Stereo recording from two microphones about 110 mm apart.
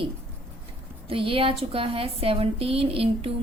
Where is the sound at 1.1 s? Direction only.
55° right (ahead or behind).